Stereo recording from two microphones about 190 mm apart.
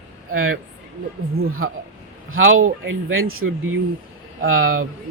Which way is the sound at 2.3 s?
90° right.